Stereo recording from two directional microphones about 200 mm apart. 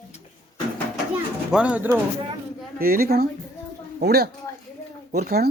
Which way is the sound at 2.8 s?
50° right (ahead or behind).